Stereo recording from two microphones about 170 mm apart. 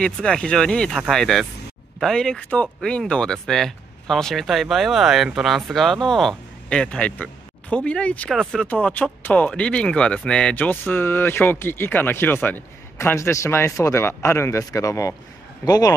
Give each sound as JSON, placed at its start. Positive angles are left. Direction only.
{"t": 0.0, "sound": "speech", "side_deg": 5}